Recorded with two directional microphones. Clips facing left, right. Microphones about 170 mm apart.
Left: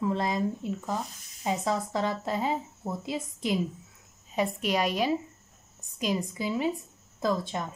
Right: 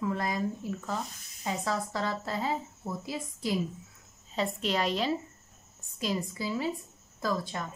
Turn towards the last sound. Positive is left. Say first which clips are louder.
# left 3 dB
turn(degrees=20)  # may be behind; listen again after turning